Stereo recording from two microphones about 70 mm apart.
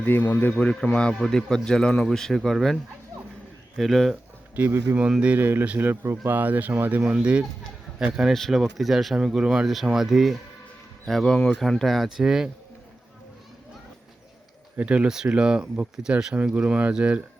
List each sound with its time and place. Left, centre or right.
0.0 s speech: left
0.7 s a man's voice: centre
3.8 s speech: centre
4.1 s a sound: right
5.2 s speech: right
7.0 s speech: centre
8.3 s a man's voice: centre
14.8 s speech: centre